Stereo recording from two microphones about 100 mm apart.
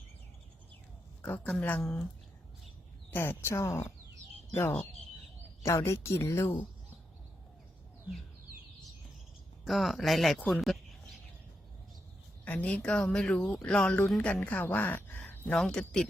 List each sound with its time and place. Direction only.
1.2 s speech: 10° left (ahead or behind)
3.1 s speech: 25° left (ahead or behind)
5.6 s speech: 30° left (ahead or behind)
9.6 s speech: centre (ahead or behind)
10.5 s a sound: centre (ahead or behind)
12.5 s speech: 15° left (ahead or behind)
15.5 s speech: 5° left (ahead or behind)